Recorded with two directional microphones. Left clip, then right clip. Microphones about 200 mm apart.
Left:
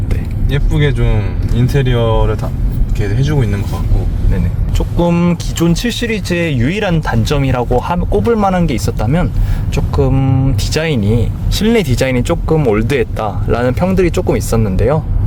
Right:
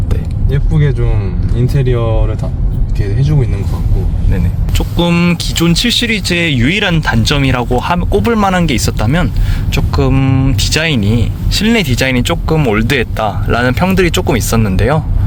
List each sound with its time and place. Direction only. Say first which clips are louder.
0.5 s speech: left 2 dB; 55° left (ahead or behind)
4.3 s speech: right 3 dB; 5° right (ahead or behind)